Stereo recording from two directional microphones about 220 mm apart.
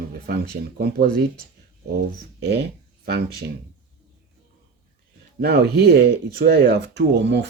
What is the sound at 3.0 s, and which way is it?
Speech, 45° right (ahead or behind).